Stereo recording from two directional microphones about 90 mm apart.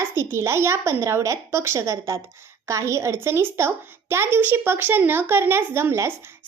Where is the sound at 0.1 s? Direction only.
30° right (ahead or behind).